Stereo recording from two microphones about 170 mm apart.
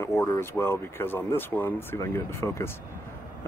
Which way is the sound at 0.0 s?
20° left (ahead or behind).